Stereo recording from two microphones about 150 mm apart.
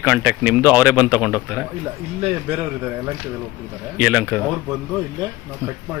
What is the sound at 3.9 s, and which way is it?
Speech, 10° right (ahead or behind).